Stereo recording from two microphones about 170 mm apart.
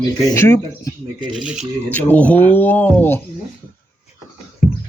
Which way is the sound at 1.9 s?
10° left (ahead or behind).